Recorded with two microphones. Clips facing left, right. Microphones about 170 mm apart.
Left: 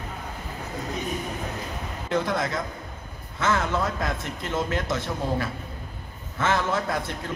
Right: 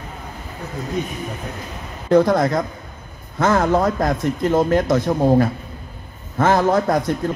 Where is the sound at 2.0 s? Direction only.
40° right (ahead or behind).